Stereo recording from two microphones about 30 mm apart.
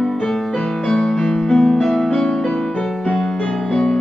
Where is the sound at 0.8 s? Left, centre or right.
Left.